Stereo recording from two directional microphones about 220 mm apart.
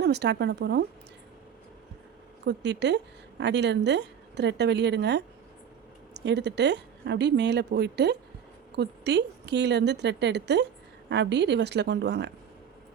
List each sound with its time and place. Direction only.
0.0 s a woman's voice: 50° right (ahead or behind)
2.4 s a woman's voice: 50° right (ahead or behind)
6.2 s a woman's voice: 50° right (ahead or behind)